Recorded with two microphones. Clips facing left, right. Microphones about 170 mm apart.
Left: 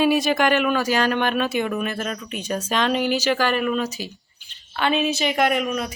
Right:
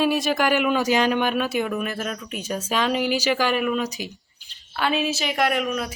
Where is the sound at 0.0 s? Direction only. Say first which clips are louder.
Left 2 dB; centre (ahead or behind); by 4.1 s 15° right (ahead or behind).